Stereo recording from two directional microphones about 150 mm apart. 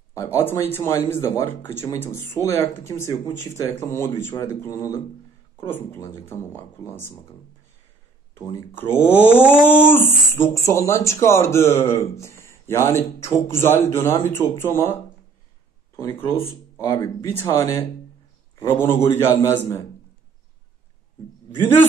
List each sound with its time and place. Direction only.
0.1 s speech: 15° left (ahead or behind)
8.4 s speech: 15° left (ahead or behind)
16.2 s speech: 15° left (ahead or behind)
21.5 s speech: 15° left (ahead or behind)